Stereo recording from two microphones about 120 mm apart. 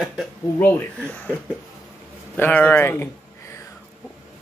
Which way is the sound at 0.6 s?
10° left (ahead or behind).